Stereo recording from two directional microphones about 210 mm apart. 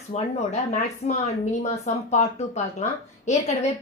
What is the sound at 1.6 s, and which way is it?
A woman's voice, 35° left (ahead or behind).